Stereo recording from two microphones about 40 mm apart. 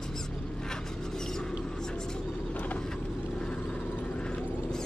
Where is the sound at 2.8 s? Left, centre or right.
Centre.